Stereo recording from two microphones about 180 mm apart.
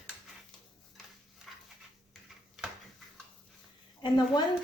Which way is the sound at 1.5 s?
Centre (ahead or behind).